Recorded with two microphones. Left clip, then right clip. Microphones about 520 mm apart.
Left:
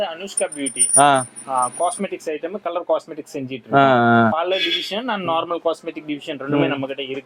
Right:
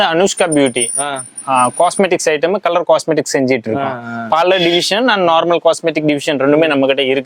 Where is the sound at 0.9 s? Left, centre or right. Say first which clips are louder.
Left 7 dB; left.